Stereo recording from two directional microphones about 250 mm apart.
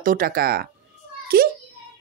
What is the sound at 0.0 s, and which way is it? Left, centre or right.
A child's voice, right.